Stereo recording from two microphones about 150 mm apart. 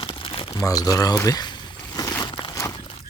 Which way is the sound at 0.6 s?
25° left (ahead or behind).